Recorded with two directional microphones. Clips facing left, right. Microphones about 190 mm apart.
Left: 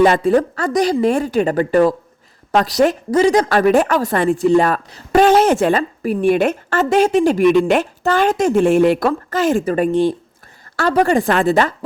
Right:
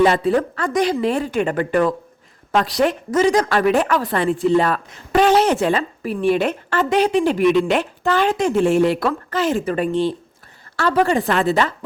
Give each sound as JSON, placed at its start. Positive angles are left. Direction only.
{"t": 0.0, "sound": "a woman's voice", "side_deg": 45}